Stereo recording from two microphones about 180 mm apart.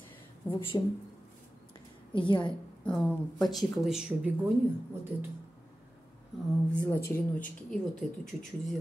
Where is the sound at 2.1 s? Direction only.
25° left (ahead or behind).